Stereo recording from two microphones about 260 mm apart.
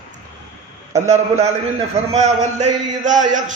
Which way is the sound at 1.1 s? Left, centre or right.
Right.